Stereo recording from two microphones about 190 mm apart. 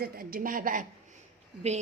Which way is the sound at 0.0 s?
50° right (ahead or behind).